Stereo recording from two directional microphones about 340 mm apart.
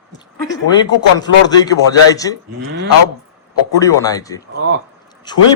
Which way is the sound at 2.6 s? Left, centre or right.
Right.